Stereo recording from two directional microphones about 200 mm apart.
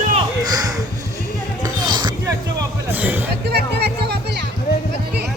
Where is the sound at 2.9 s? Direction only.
10° right (ahead or behind).